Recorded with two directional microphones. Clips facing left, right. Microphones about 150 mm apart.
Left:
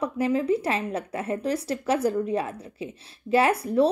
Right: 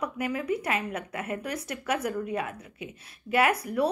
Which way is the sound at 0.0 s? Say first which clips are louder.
Left 6 dB; 30° left (ahead or behind).